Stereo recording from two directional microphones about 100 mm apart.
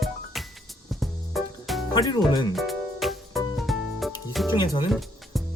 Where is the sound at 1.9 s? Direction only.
40° left (ahead or behind).